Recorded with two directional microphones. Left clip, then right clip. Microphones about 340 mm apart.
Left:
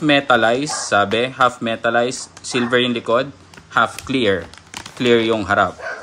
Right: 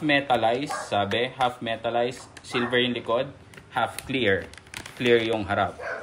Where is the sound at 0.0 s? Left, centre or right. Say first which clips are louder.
Left 8 dB; centre.